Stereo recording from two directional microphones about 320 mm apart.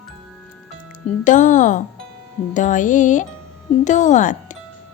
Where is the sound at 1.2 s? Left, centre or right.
Left.